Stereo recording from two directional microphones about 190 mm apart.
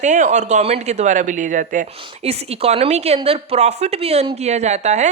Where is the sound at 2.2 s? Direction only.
35° right (ahead or behind).